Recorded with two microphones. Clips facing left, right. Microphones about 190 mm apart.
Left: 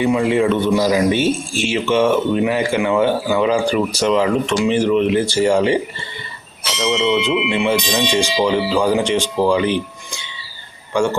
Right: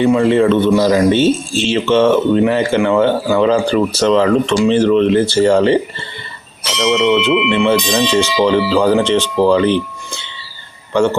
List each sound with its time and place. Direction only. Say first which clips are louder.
0.0 s speech: right 4 dB; 15° left (ahead or behind)
6.9 s bell: right 4 dB; 60° right (ahead or behind)
7.5 s speech: right 4 dB; 10° left (ahead or behind)
10.9 s speech: right 4 dB; 15° left (ahead or behind)